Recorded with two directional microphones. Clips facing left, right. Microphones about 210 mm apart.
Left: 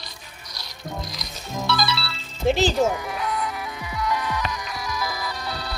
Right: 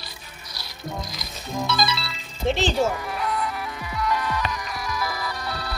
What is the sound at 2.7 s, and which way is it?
Speech, centre (ahead or behind).